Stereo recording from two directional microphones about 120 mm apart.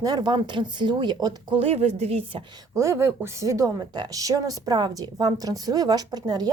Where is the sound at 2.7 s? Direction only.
25° right (ahead or behind).